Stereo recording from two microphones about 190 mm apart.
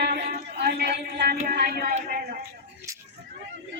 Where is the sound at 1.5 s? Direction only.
55° right (ahead or behind).